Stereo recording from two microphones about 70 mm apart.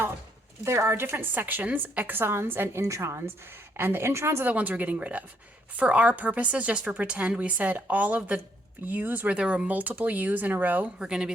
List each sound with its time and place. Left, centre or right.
0.6 s a woman's voice: right
4.4 s a woman's voice: right
11.0 s speech: centre